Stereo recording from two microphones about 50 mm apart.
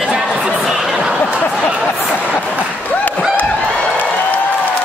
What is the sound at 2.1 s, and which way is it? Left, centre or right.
Speech, left.